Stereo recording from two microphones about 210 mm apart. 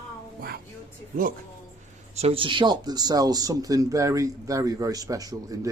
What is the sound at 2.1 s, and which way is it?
Speech, 25° right (ahead or behind).